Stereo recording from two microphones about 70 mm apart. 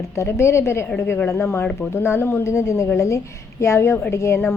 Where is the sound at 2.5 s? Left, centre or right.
Left.